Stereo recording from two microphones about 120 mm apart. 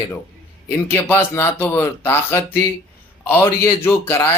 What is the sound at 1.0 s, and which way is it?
A man's voice, 20° left (ahead or behind).